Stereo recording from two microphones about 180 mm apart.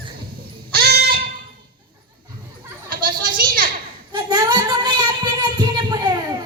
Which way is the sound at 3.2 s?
55° right (ahead or behind).